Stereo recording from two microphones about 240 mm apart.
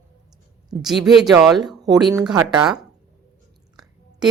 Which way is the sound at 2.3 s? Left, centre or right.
Centre.